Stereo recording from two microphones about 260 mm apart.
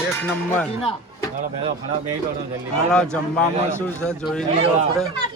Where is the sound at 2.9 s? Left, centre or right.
Centre.